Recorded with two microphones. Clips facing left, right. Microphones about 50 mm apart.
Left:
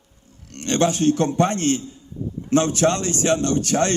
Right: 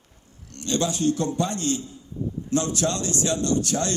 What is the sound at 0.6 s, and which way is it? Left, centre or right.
A man's voice, left.